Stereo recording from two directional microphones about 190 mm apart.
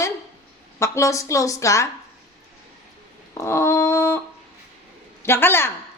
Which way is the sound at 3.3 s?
15° left (ahead or behind).